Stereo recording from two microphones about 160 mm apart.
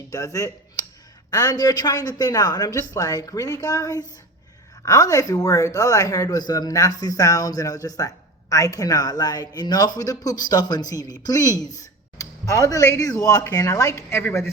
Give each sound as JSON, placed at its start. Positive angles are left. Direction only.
{"t": 0.1, "sound": "a woman's voice", "side_deg": 20}